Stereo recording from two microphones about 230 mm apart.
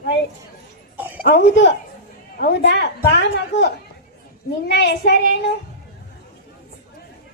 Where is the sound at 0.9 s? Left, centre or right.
Centre.